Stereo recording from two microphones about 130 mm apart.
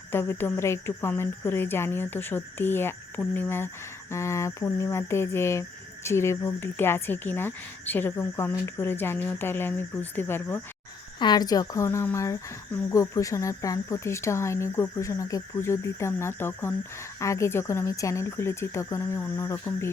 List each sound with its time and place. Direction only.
0.1 s speech: 15° left (ahead or behind)
11.2 s speech: 30° left (ahead or behind)